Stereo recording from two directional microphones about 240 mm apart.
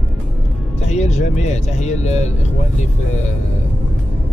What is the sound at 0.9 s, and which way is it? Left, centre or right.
Speech, left.